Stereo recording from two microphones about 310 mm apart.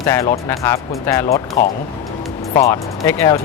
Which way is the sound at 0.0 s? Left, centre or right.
Centre.